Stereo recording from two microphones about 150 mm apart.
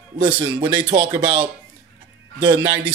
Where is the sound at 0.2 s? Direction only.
30° right (ahead or behind).